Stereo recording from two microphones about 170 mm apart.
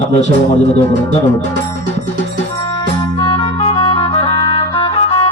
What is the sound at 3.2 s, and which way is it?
Clarinet, 35° left (ahead or behind).